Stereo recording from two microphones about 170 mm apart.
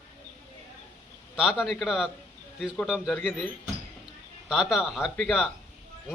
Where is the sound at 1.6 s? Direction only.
Centre (ahead or behind).